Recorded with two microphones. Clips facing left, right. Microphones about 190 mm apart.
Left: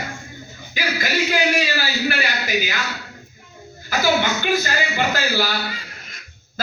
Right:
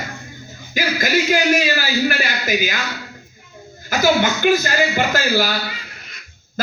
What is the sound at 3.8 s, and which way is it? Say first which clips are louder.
Speech: right 3 dB; 45° right (ahead or behind).